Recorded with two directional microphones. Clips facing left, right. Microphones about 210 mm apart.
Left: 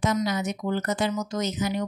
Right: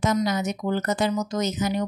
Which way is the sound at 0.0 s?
45° right (ahead or behind).